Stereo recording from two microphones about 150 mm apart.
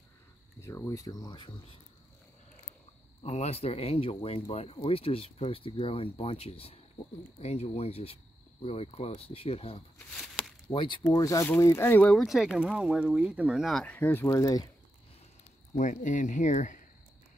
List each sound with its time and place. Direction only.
0.6 s speech: 20° left (ahead or behind)
3.2 s speech: 45° left (ahead or behind)
9.9 s a sound: 5° left (ahead or behind)
10.7 s speech: 35° left (ahead or behind)
11.0 s speech: 20° left (ahead or behind)
15.7 s speech: 55° left (ahead or behind)